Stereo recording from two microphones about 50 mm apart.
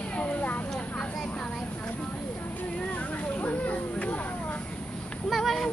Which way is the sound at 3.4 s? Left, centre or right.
Left.